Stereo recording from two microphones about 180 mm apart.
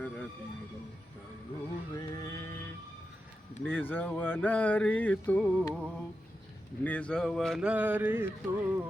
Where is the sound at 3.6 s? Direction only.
10° left (ahead or behind).